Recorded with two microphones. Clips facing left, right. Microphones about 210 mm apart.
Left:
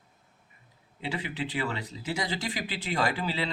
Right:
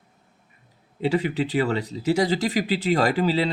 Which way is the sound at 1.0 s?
40° right (ahead or behind).